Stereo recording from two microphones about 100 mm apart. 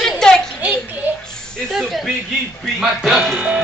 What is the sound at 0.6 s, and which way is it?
Speech, 15° right (ahead or behind).